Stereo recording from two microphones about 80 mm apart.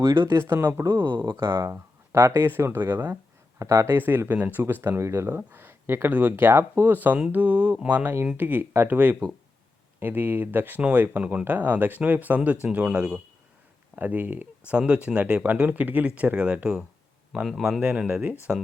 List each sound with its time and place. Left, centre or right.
0.1 s speech: right
1.1 s speech: right
1.4 s speech: right
3.6 s speech: right
5.4 s speech: right
17.4 s speech: centre; by 18.3 s right